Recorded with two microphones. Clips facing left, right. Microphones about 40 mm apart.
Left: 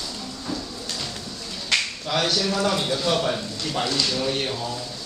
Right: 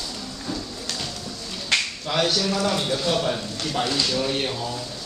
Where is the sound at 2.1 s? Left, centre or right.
Centre.